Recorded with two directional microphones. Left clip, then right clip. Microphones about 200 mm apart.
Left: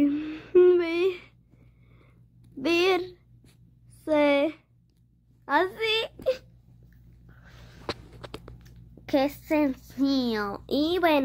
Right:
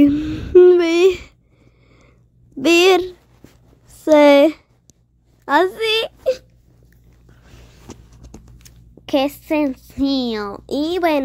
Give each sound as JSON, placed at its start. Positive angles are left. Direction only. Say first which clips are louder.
{"t": 0.0, "sound": "a sound", "louder": "right 11 dB", "side_deg": -25}
{"t": 2.6, "sound": "speech", "louder": "right 11 dB", "side_deg": -35}
{"t": 8.5, "sound": "a child's voice", "louder": "right 7 dB", "side_deg": -25}